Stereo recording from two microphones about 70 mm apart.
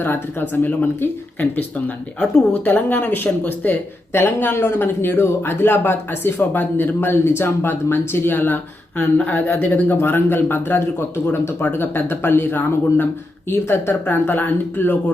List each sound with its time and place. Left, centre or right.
0.0 s speech: left
2.1 s speech: left